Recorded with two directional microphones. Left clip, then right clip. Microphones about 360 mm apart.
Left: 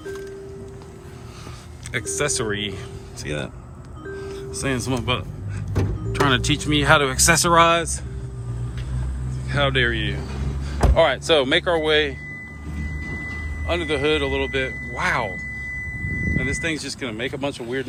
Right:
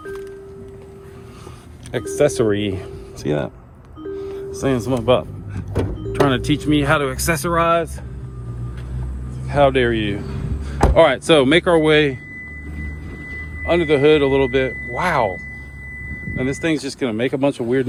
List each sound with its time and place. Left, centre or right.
1.9 s speech: centre
4.1 s music: centre
6.1 s speech: centre
9.5 s speech: centre
13.7 s speech: centre
16.4 s speech: centre